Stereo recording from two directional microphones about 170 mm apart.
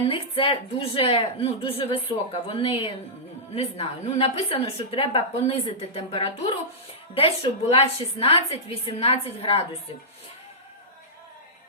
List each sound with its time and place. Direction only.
0.1 s a woman's voice: 30° left (ahead or behind)